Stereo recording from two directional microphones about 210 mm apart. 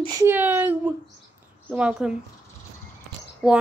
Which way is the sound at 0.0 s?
15° right (ahead or behind).